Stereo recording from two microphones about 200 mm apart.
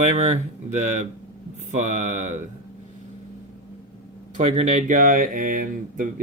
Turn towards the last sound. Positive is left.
turn(degrees=-45)  # may be behind; listen again after turning